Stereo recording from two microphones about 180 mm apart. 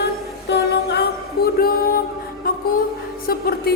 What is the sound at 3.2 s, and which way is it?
Speech, 55° left (ahead or behind).